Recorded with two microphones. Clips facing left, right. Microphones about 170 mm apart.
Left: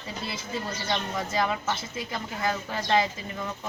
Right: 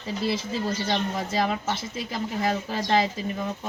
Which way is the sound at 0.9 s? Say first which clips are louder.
Right 3 dB; 25° right (ahead or behind).